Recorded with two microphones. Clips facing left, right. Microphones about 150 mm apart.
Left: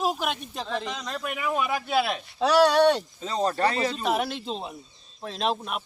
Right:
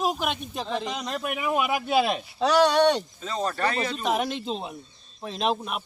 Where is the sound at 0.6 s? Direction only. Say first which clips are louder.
Right 2 dB; 15° right (ahead or behind).